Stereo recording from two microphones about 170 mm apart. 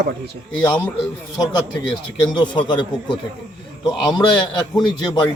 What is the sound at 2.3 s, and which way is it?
Speech, 25° left (ahead or behind).